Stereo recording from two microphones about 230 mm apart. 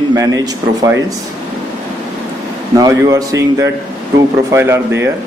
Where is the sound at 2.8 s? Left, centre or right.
Centre.